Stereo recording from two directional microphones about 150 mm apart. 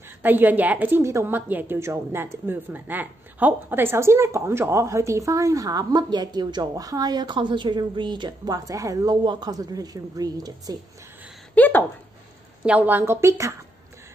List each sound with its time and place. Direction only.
0.2 s a woman's voice: 10° right (ahead or behind)
11.5 s speech: 10° left (ahead or behind)
12.6 s a woman's voice: 10° right (ahead or behind)